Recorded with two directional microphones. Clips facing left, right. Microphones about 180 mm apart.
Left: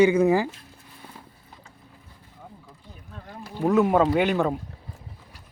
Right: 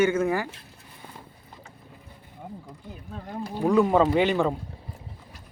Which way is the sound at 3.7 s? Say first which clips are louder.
Even; 5° left (ahead or behind).